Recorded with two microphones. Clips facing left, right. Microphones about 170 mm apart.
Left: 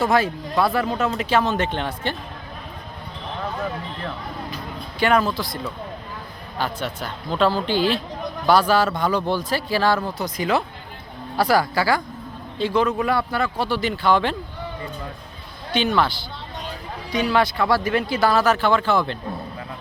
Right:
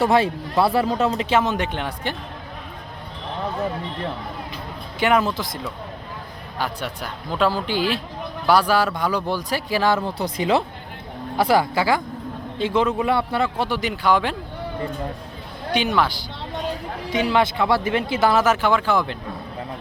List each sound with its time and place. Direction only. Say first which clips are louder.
0.0 s speech: right 2 dB; 30° right (ahead or behind); by 2.1 s 10° right (ahead or behind)
4.5 s speech: left 1 dB; 20° right (ahead or behind)
6.6 s speech: left 1 dB; 10° right (ahead or behind)
10.2 s speech: right 2 dB; 30° right (ahead or behind); by 14.3 s 10° right (ahead or behind)
15.7 s speech: even; 10° right (ahead or behind)
17.1 s speech: even; 20° right (ahead or behind)